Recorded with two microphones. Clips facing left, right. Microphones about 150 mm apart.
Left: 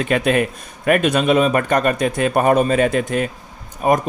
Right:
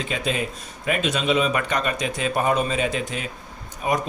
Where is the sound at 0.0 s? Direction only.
60° left (ahead or behind).